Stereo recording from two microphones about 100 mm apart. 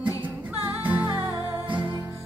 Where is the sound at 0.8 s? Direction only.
15° right (ahead or behind).